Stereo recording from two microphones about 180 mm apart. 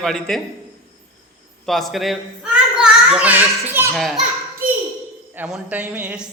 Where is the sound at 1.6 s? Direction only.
Centre (ahead or behind).